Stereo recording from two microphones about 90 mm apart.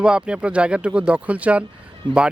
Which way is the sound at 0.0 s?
10° right (ahead or behind).